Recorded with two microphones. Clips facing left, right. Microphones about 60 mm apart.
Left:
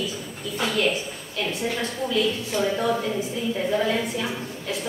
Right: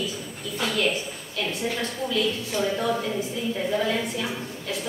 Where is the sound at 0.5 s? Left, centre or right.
Left.